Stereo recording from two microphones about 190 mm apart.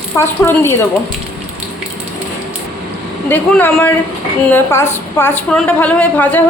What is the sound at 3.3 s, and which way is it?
A woman's voice, 10° left (ahead or behind).